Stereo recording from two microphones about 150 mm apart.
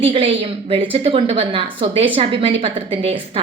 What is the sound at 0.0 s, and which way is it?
A woman's voice, 40° right (ahead or behind).